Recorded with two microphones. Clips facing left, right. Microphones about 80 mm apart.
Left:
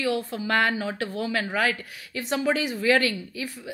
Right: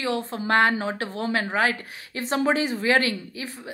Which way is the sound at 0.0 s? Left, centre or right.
Right.